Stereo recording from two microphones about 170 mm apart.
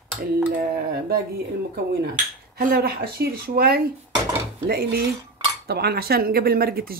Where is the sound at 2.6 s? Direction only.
60° right (ahead or behind).